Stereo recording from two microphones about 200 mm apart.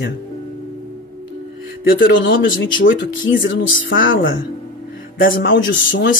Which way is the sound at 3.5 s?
75° left (ahead or behind).